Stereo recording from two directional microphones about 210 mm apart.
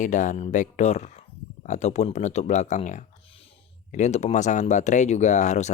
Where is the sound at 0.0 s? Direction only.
35° left (ahead or behind).